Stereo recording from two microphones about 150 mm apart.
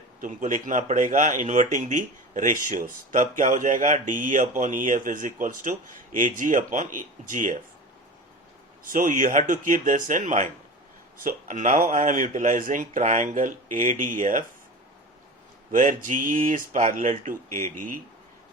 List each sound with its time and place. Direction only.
0.2 s speech: 60° right (ahead or behind)
8.8 s speech: 65° right (ahead or behind)
15.8 s speech: 60° right (ahead or behind)